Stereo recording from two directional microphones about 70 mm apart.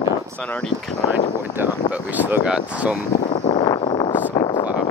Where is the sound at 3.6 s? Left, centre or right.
Left.